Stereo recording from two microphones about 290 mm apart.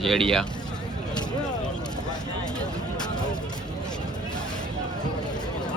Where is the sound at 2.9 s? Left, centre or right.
Centre.